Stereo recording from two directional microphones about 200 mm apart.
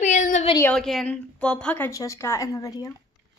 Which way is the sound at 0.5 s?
10° left (ahead or behind).